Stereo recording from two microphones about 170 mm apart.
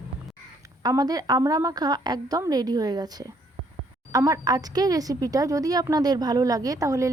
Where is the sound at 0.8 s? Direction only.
20° right (ahead or behind).